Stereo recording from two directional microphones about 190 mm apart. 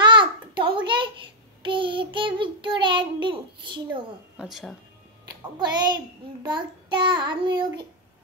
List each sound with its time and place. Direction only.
0.0 s a sound: 25° right (ahead or behind)
1.6 s child singing: 25° right (ahead or behind)
4.4 s speech: centre (ahead or behind)
5.6 s child singing: 25° right (ahead or behind)